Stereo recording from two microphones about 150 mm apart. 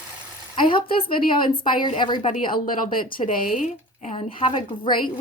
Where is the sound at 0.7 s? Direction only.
40° left (ahead or behind).